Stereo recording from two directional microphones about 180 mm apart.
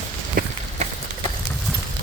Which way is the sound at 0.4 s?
50° right (ahead or behind).